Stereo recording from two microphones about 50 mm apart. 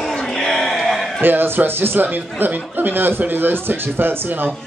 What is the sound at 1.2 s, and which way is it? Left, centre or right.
Speech, right.